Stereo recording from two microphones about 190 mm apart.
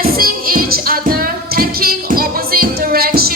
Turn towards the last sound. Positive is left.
turn(degrees=-55)  # may be behind; listen again after turning